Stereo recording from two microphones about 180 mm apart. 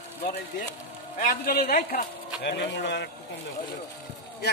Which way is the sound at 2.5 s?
70° left (ahead or behind).